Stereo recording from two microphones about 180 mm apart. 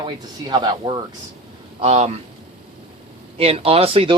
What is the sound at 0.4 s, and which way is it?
Speech, 25° right (ahead or behind).